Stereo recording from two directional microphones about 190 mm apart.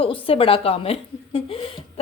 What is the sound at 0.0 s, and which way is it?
A woman's voice, 30° left (ahead or behind).